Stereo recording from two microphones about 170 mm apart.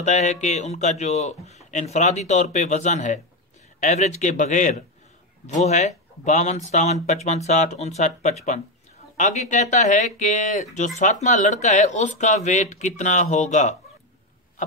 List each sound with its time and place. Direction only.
0.0 s a man's voice: 45° left (ahead or behind)